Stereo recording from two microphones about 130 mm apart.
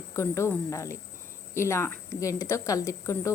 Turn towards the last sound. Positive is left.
turn(degrees=20)  # may be behind; listen again after turning